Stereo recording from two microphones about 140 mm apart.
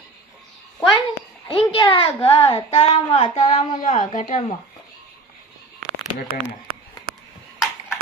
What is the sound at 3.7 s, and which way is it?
Speech, 70° left (ahead or behind).